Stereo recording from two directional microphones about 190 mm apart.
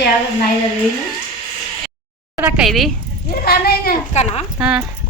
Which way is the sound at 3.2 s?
55° left (ahead or behind).